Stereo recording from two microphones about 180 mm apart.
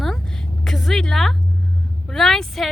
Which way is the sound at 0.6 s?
Centre (ahead or behind).